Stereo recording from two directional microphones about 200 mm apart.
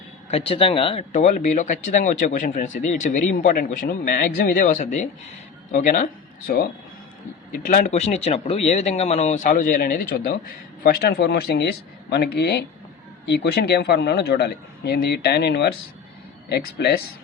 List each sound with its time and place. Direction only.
0.3 s speech: 30° left (ahead or behind)
7.5 s a man's voice: 45° left (ahead or behind)